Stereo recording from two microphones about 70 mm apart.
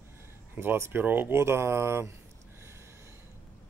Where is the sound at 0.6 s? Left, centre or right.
Right.